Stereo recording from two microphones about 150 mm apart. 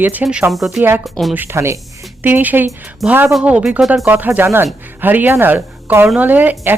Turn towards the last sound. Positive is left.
turn(degrees=-10)  # may be behind; listen again after turning